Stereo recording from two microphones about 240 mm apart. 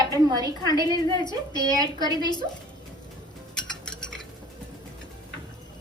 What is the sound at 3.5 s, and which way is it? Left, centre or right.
Cutlery, centre.